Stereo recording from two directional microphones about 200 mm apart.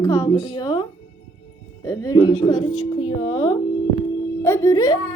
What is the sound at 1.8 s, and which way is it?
Speech, 20° left (ahead or behind).